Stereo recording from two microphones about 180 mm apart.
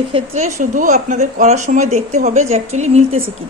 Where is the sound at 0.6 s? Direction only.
45° right (ahead or behind).